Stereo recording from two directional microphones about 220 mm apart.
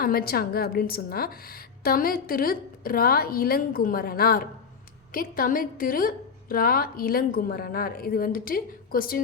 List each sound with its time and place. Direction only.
0.0 s a woman's voice: 40° left (ahead or behind)